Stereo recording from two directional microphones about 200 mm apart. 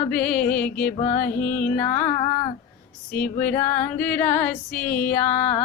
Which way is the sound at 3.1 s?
10° left (ahead or behind).